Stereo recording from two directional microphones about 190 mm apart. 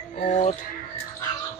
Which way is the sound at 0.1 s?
35° left (ahead or behind).